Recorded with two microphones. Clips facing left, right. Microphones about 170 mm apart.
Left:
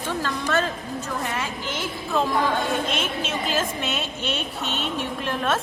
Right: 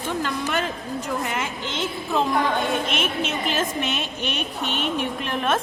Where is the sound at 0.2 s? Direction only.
15° right (ahead or behind).